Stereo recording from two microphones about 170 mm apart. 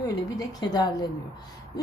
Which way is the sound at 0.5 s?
25° left (ahead or behind).